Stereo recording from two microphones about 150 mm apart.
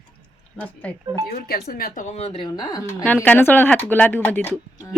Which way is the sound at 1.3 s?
90° left.